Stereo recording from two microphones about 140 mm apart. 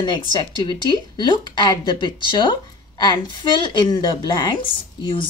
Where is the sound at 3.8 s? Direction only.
30° left (ahead or behind).